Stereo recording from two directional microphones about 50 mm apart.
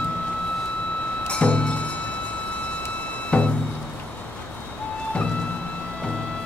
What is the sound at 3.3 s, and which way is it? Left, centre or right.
Music, left.